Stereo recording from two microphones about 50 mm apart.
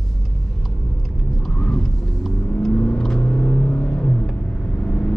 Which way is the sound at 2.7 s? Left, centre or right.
Centre.